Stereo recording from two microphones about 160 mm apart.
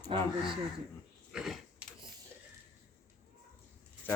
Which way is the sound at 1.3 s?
Centre (ahead or behind).